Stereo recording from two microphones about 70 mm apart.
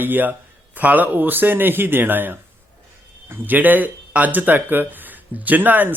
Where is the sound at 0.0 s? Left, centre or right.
Right.